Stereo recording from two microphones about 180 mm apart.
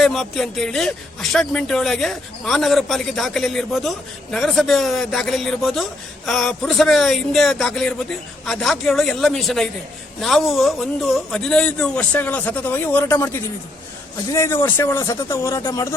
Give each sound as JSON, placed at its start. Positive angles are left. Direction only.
{"t": 0.0, "sound": "a man's voice", "side_deg": 0}